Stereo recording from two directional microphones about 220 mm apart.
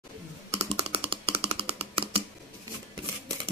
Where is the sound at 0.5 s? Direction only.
30° right (ahead or behind).